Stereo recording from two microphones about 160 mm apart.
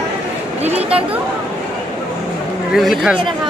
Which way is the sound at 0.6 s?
40° right (ahead or behind).